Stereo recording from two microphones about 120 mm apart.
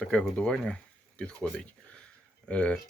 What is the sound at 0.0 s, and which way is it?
Speech, 5° left (ahead or behind).